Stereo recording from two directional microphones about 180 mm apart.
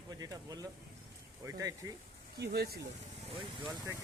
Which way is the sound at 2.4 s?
65° right (ahead or behind).